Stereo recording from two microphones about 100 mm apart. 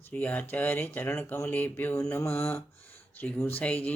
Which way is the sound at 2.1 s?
25° left (ahead or behind).